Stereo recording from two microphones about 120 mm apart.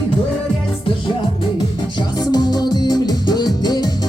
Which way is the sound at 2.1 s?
35° left (ahead or behind).